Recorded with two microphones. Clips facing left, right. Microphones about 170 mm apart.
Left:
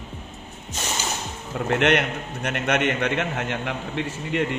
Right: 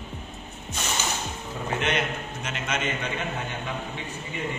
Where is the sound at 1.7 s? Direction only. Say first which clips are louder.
Left 7 dB; 70° left (ahead or behind).